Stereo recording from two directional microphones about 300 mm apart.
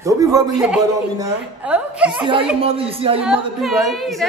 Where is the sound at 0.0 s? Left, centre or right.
Centre.